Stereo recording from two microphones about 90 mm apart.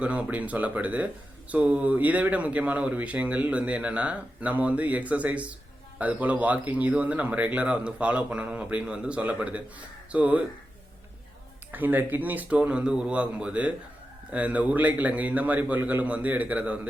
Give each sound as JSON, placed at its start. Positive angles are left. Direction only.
{"t": 0.0, "sound": "speech", "side_deg": -15}
{"t": 11.7, "sound": "speech", "side_deg": -20}